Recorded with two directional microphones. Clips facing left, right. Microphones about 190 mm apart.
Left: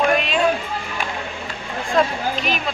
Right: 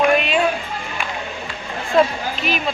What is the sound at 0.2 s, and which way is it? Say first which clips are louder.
Music: right 2 dB; centre (ahead or behind).